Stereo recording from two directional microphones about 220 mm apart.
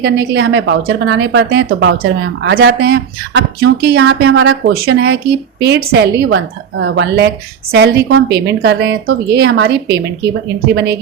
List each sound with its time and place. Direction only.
0.0 s a woman's voice: 50° right (ahead or behind)